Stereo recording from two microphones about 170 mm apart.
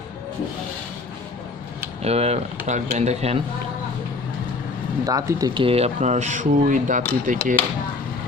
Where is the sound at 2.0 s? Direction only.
35° right (ahead or behind).